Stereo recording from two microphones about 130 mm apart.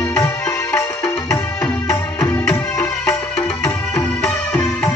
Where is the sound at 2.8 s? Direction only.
25° left (ahead or behind).